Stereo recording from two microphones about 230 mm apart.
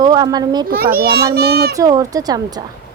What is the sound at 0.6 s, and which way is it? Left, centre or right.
A child's voice, right.